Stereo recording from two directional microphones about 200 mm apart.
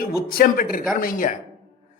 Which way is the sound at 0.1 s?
50° left (ahead or behind).